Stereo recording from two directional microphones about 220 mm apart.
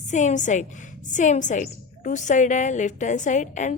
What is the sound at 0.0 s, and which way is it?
A woman's voice, 35° left (ahead or behind).